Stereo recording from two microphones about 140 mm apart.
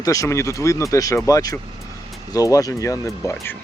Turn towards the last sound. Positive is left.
turn(degrees=20)  # may be behind; listen again after turning